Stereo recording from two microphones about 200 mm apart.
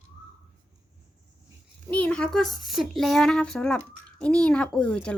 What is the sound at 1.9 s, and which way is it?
Speech, 5° left (ahead or behind).